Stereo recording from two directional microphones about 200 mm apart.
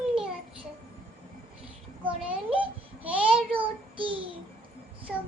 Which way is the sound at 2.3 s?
5° right (ahead or behind).